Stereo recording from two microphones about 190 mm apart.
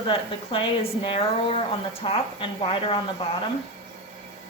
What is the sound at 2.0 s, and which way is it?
Speech, 30° left (ahead or behind).